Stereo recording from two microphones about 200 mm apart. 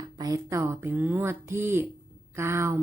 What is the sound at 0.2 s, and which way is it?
Speech, 15° right (ahead or behind).